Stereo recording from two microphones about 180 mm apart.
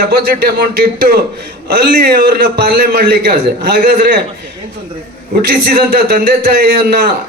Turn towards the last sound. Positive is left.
turn(degrees=-60)  # may be behind; listen again after turning